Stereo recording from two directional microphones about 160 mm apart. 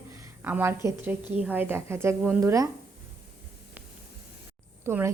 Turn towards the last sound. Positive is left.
turn(degrees=-15)  # may be behind; listen again after turning